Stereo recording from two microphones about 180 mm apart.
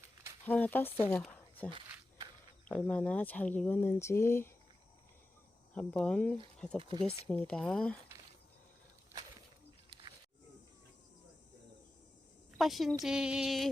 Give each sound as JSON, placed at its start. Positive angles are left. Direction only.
{"t": 0.4, "sound": "speech", "side_deg": 10}
{"t": 1.2, "sound": "a sound", "side_deg": 10}
{"t": 2.6, "sound": "speech", "side_deg": 5}
{"t": 5.7, "sound": "speech", "side_deg": 5}
{"t": 6.7, "sound": "speech", "side_deg": -30}
{"t": 7.3, "sound": "speech", "side_deg": 5}
{"t": 12.5, "sound": "speech", "side_deg": 0}